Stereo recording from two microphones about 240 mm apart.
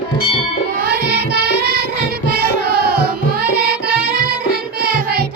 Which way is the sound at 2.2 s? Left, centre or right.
Right.